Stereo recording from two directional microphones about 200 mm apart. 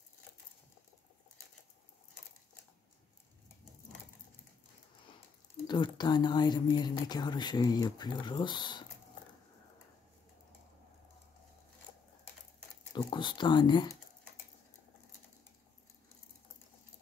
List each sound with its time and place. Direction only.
5.7 s speech: 20° left (ahead or behind)
12.9 s speech: 25° left (ahead or behind)